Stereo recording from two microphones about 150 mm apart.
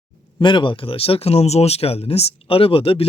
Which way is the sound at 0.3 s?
35° left (ahead or behind).